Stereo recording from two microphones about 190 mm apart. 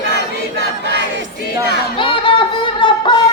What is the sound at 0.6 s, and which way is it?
Choir, 55° left (ahead or behind).